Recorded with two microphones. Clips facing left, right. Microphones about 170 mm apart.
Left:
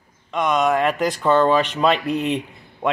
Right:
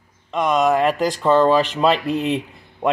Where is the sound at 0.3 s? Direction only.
Centre (ahead or behind).